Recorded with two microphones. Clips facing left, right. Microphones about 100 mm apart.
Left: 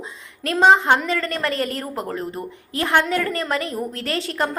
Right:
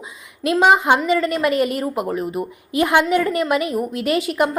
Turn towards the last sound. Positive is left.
turn(degrees=-10)  # may be behind; listen again after turning